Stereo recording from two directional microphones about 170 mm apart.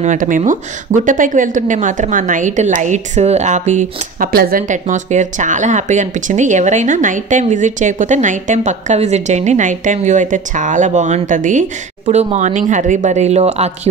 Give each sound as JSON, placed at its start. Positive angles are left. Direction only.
{"t": 0.0, "sound": "speech", "side_deg": -50}
{"t": 4.3, "sound": "speech", "side_deg": -60}